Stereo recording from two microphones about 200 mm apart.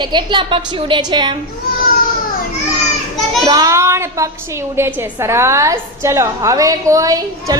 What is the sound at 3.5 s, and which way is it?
A woman's voice, 15° right (ahead or behind).